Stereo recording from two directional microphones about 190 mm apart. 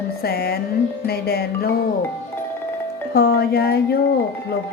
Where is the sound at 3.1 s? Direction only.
55° left (ahead or behind).